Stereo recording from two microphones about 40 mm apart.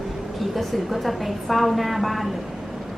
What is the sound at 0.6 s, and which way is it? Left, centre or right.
A woman's voice, centre.